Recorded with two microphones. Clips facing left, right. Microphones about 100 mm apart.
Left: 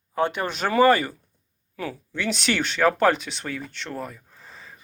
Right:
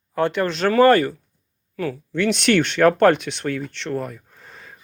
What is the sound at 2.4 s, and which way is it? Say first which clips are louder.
Speech: right 5 dB; 5° left (ahead or behind).